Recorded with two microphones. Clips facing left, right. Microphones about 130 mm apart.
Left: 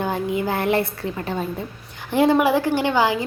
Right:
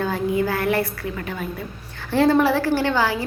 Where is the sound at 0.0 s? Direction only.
20° left (ahead or behind).